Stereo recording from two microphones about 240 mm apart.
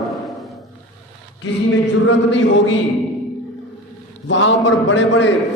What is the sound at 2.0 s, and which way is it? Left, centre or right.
Speech, left.